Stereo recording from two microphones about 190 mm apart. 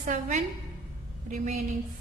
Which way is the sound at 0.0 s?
40° right (ahead or behind).